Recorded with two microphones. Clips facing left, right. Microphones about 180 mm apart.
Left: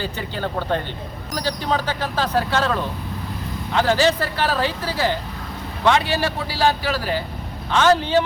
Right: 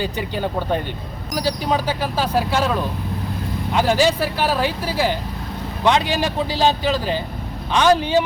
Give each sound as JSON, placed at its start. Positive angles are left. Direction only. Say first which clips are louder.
{"t": 0.0, "sound": "speech", "louder": "right 3 dB", "side_deg": -15}